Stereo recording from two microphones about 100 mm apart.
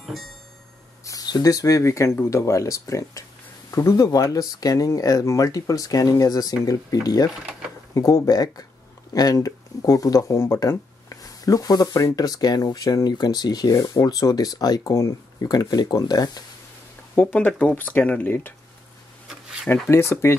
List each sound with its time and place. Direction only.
0.0 s music: centre (ahead or behind)
1.0 s speech: 40° left (ahead or behind)
17.1 s speech: 15° left (ahead or behind)
19.7 s speech: 25° left (ahead or behind)